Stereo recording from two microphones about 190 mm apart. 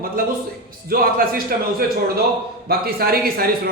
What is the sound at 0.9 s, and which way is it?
Speech, 50° right (ahead or behind).